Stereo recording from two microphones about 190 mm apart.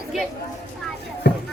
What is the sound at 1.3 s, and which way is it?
Music, 60° left (ahead or behind).